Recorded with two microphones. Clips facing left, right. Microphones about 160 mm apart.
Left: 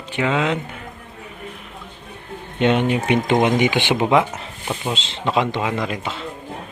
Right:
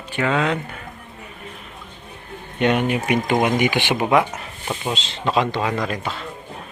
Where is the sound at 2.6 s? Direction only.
25° left (ahead or behind).